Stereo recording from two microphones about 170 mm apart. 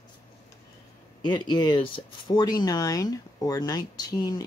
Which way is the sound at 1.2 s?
25° left (ahead or behind).